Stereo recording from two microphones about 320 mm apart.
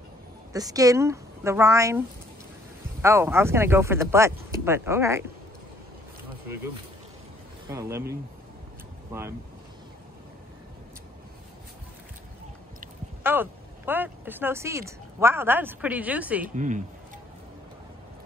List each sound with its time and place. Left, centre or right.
0.5 s speech: centre
7.7 s speech: centre
13.2 s speech: centre
16.4 s speech: right